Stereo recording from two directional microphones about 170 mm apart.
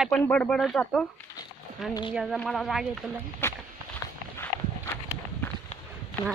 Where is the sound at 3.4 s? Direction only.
15° left (ahead or behind).